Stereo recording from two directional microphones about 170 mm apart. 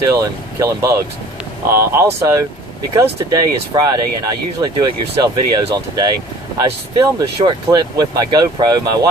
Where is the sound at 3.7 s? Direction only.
25° right (ahead or behind).